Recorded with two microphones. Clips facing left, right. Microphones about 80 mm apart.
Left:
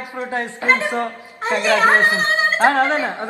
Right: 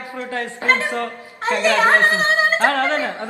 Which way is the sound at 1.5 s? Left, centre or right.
Centre.